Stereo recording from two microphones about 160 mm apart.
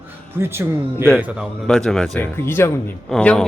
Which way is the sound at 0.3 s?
15° right (ahead or behind).